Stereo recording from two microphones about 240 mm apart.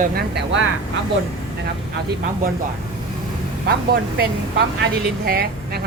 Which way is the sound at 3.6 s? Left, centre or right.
Right.